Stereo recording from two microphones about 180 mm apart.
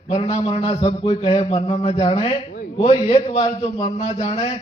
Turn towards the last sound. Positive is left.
turn(degrees=40)  # may be behind; listen again after turning